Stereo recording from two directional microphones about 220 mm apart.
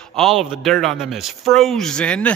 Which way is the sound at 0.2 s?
Centre (ahead or behind).